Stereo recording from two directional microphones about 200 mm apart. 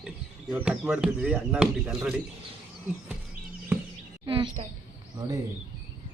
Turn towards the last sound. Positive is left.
turn(degrees=-15)  # may be behind; listen again after turning